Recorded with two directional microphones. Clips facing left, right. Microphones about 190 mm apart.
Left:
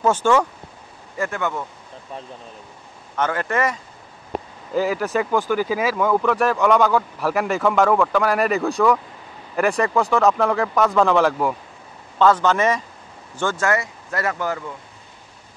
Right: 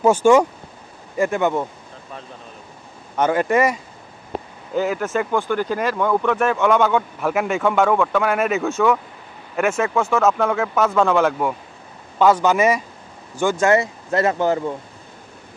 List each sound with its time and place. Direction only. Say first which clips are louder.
0.0 s speech: right 4 dB; 10° right (ahead or behind)
3.2 s speech: right 5 dB; 15° right (ahead or behind)
4.7 s speech: even; centre (ahead or behind)
12.2 s speech: right 1 dB; 10° right (ahead or behind)
13.7 s speech: right 6 dB; 25° right (ahead or behind)